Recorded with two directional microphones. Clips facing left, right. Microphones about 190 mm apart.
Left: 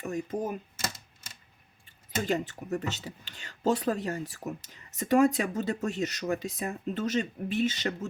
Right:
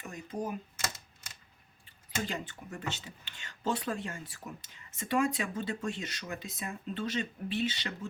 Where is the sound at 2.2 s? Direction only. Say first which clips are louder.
Left 8 dB; 40° left (ahead or behind).